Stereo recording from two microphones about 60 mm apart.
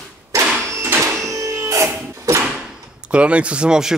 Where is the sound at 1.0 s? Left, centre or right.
Right.